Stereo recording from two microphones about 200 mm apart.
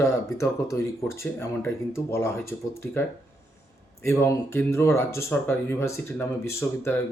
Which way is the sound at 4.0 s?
15° left (ahead or behind).